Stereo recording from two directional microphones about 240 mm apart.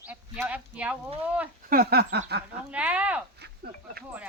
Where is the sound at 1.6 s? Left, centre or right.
Right.